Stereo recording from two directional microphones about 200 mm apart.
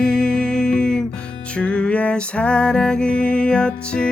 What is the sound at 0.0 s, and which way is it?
Music, 5° left (ahead or behind).